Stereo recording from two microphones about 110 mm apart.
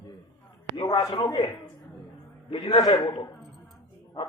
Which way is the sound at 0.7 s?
40° left (ahead or behind).